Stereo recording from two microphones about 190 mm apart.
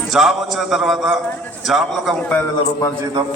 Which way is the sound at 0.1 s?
Centre (ahead or behind).